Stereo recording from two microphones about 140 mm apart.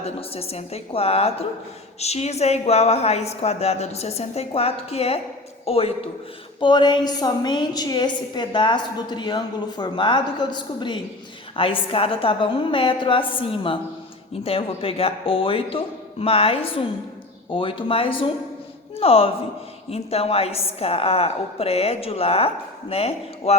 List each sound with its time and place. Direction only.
0.0 s a woman's voice: 45° left (ahead or behind)
6.6 s a woman's voice: 30° left (ahead or behind)